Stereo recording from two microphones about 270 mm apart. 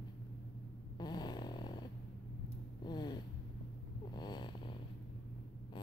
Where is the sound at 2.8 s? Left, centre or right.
Centre.